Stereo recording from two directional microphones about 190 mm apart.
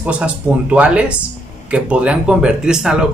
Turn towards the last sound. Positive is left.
turn(degrees=-5)  # may be behind; listen again after turning